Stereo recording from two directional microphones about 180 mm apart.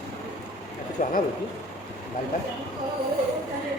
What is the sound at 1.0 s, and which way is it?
Speech, 50° left (ahead or behind).